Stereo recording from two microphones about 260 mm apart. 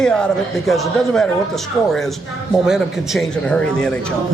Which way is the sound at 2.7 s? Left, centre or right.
Centre.